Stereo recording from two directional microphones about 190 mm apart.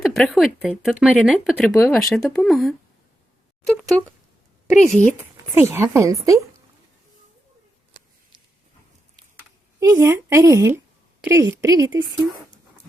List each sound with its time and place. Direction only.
0.2 s speech: centre (ahead or behind)
5.5 s a woman's voice: 15° right (ahead or behind)
9.8 s a woman's voice: 15° right (ahead or behind)